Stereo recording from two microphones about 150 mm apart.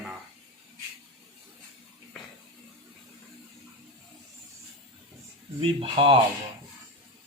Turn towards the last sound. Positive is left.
turn(degrees=-35)  # may be behind; listen again after turning